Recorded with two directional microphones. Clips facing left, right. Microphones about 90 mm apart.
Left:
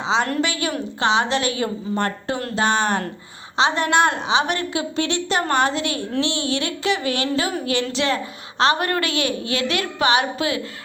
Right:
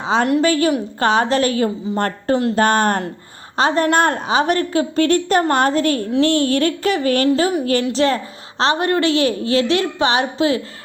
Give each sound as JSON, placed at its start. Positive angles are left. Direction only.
{"t": 0.0, "sound": "a woman's voice", "side_deg": -50}